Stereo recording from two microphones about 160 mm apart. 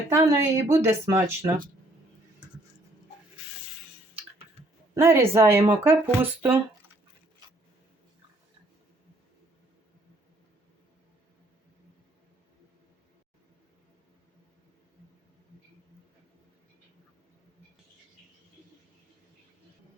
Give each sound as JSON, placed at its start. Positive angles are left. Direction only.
{"t": 0.1, "sound": "speech", "side_deg": -15}
{"t": 4.9, "sound": "speech", "side_deg": -15}